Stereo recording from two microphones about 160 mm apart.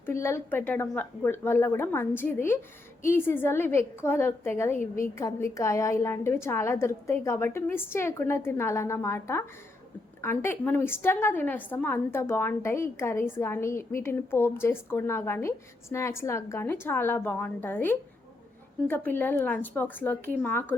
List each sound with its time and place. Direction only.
0.0 s a woman's voice: 15° left (ahead or behind)